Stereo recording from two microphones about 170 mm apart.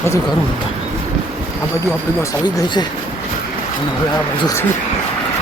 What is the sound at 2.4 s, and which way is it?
Speech, 25° left (ahead or behind).